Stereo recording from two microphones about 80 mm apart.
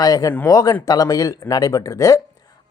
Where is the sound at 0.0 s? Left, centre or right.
Left.